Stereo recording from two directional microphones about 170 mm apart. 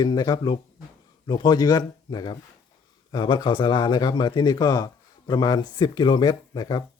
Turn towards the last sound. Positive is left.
turn(degrees=25)  # may be behind; listen again after turning